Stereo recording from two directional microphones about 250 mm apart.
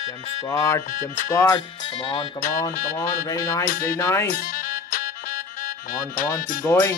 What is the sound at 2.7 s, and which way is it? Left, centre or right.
Speech, left.